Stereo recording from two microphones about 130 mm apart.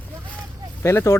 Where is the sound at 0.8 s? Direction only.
20° left (ahead or behind).